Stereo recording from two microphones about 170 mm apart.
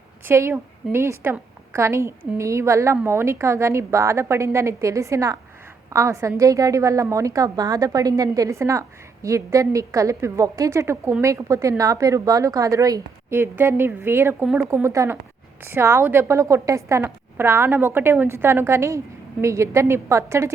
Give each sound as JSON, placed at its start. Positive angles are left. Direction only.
{"t": 0.3, "sound": "a woman's voice", "side_deg": -15}